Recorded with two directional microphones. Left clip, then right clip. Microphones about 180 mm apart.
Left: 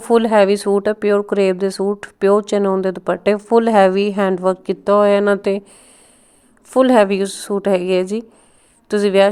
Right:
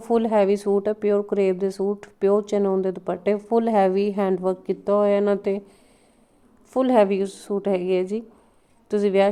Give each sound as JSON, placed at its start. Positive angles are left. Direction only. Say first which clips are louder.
{"t": 0.0, "sound": "a woman's voice", "louder": "left 7 dB", "side_deg": 30}